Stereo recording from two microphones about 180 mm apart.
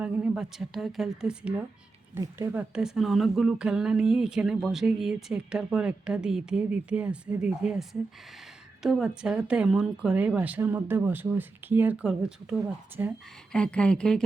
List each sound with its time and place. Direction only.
0.0 s speech: 10° right (ahead or behind)
2.1 s speech: 15° right (ahead or behind)
2.6 s speech: 5° right (ahead or behind)
13.5 s speech: 5° left (ahead or behind)